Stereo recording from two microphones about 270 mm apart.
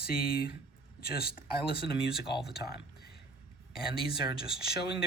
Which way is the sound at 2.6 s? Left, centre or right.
Left.